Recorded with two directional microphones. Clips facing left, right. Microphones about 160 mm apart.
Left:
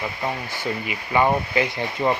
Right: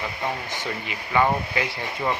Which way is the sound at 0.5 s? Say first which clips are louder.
Left 3 dB; 10° left (ahead or behind).